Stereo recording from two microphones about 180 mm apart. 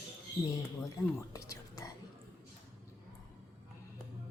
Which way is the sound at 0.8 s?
20° left (ahead or behind).